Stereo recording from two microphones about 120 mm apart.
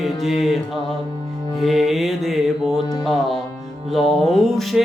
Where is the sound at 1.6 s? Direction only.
Centre (ahead or behind).